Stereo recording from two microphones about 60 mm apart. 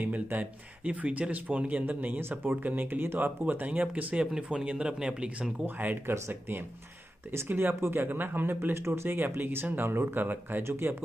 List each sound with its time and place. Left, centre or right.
0.0 s speech: right; by 5.5 s centre
5.8 s speech: right
7.4 s speech: right